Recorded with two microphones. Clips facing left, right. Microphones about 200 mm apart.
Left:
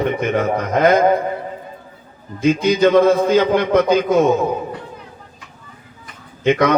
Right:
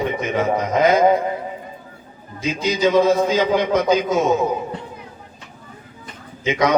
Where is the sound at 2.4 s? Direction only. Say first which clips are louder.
Left 6 dB; 55° left (ahead or behind).